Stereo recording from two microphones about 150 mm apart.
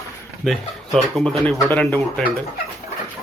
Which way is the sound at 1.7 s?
15° left (ahead or behind).